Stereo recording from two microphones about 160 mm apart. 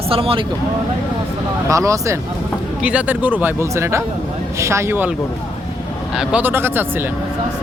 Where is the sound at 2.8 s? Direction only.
5° right (ahead or behind).